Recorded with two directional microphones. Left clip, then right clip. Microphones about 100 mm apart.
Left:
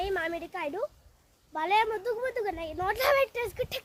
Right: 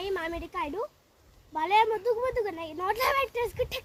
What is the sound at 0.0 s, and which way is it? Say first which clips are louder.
A child's voice: left 1 dB; 15° left (ahead or behind).